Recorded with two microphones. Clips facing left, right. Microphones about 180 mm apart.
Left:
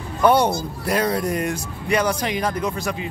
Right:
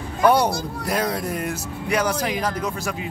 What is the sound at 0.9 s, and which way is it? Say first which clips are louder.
Speech: left 3 dB; 10° left (ahead or behind).